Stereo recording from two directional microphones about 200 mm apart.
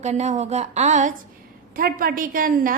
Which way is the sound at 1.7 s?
45° right (ahead or behind).